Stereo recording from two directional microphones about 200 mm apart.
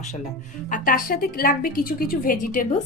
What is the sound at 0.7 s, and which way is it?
A woman's voice, 45° left (ahead or behind).